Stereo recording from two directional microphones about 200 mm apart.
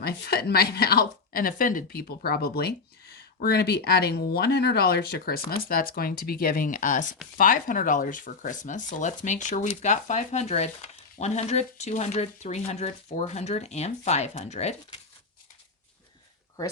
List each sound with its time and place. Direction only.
0.0 s speech: 50° left (ahead or behind); by 15.0 s 30° left (ahead or behind)